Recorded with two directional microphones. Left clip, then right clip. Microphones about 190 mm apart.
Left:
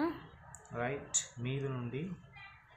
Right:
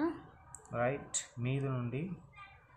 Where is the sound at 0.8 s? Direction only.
35° right (ahead or behind).